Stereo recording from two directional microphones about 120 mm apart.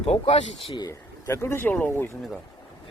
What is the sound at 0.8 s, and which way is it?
Speech, 25° left (ahead or behind).